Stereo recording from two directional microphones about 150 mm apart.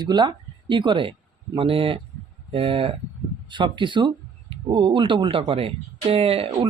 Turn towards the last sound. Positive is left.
turn(degrees=-40)  # may be behind; listen again after turning